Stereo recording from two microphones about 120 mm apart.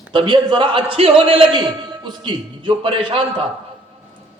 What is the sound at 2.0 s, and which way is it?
A man's voice, 40° right (ahead or behind).